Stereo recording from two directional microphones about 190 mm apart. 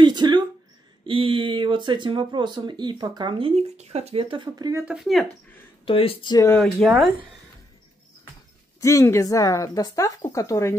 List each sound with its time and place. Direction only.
0.0 s a sound: 25° right (ahead or behind)
1.0 s speech: 30° right (ahead or behind)
4.8 s speech: centre (ahead or behind)
5.9 s speech: 30° left (ahead or behind)
6.6 s speech: centre (ahead or behind)
8.8 s speech: 15° left (ahead or behind)